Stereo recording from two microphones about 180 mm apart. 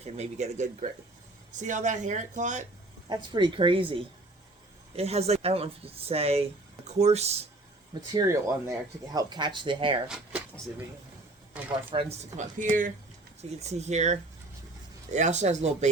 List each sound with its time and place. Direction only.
0.0 s speech: 35° right (ahead or behind)
3.1 s speech: 25° right (ahead or behind)
8.1 s speech: 20° right (ahead or behind)
11.9 s speech: 35° right (ahead or behind)